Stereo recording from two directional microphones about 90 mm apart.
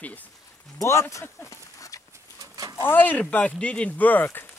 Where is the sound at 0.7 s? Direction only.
35° left (ahead or behind).